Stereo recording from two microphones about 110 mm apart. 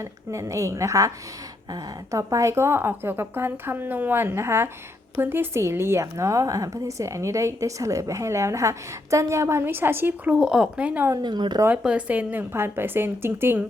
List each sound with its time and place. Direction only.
0.0 s a woman's voice: 25° right (ahead or behind)
10.3 s speech: 5° right (ahead or behind)
11.2 s speech: 40° right (ahead or behind)
11.8 s a woman's voice: 10° right (ahead or behind)